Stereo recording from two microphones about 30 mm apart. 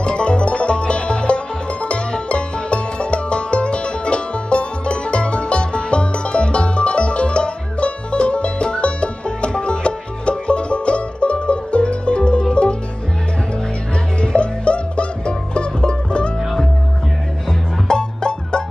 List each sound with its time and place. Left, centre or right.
0.0 s music: left
14.2 s music: left
17.8 s music: left